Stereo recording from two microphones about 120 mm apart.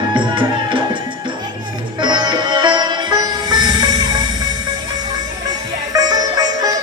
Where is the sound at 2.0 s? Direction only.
40° right (ahead or behind).